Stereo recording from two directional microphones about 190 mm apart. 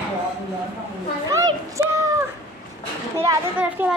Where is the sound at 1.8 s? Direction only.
15° right (ahead or behind).